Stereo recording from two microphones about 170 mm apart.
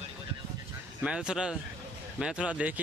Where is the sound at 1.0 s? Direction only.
5° right (ahead or behind).